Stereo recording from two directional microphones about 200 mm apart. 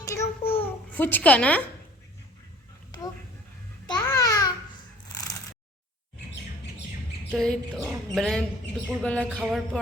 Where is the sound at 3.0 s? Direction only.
20° left (ahead or behind).